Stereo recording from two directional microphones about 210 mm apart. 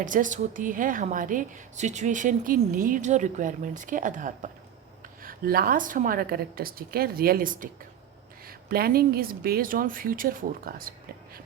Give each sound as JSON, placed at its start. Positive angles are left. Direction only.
{"t": 0.0, "sound": "a woman's voice", "side_deg": -40}